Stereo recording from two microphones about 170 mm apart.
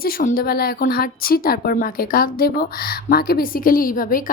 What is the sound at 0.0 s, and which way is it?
A woman's voice, 60° left (ahead or behind).